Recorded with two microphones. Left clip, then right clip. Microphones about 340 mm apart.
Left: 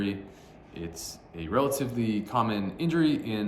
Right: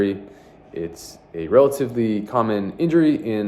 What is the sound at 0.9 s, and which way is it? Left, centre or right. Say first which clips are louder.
Speech: right 5 dB; centre.